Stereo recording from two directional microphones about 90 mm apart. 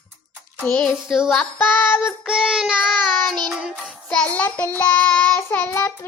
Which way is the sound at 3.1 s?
5° left (ahead or behind).